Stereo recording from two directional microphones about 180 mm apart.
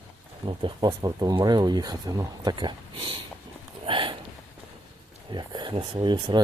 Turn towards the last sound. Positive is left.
turn(degrees=-25)  # may be behind; listen again after turning